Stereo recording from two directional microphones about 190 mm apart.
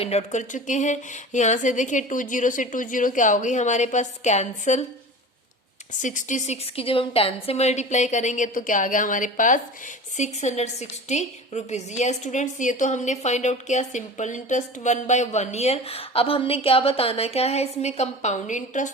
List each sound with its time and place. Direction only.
0.0 s a woman's voice: 35° left (ahead or behind)
6.0 s a woman's voice: 40° left (ahead or behind)